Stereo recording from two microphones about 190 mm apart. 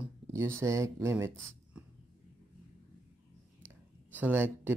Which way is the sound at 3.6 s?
10° right (ahead or behind).